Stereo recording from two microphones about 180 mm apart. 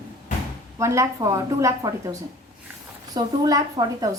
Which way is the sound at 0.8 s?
15° right (ahead or behind).